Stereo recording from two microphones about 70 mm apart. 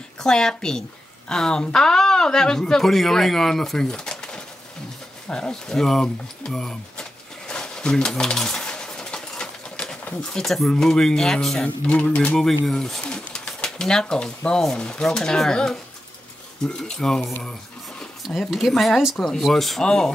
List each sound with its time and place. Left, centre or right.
0.2 s speech: centre
5.3 s a sound: centre
10.3 s speech: centre
12.6 s speech: centre